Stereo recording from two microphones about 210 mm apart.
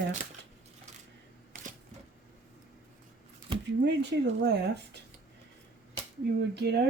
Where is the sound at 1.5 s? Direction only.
40° right (ahead or behind).